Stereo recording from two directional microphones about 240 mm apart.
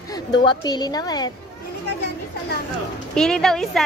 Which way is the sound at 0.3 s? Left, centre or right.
Centre.